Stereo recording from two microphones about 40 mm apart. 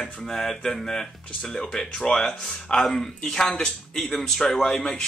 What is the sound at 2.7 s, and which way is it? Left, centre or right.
Speech, centre.